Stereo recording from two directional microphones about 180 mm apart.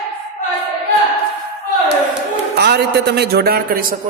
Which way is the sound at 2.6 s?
65° right (ahead or behind).